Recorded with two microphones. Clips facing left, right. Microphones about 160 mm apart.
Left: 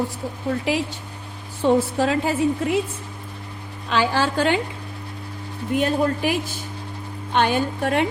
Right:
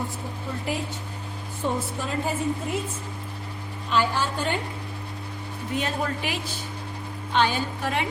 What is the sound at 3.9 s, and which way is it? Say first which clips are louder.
Speech: left 4 dB; 90° left.